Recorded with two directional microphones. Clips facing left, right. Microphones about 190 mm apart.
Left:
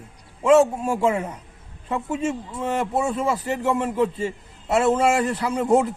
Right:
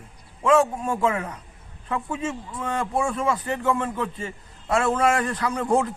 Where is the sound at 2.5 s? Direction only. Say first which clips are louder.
Even; 25° left (ahead or behind).